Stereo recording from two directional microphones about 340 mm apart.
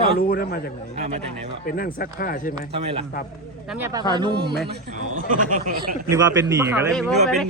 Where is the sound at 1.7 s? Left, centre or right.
Left.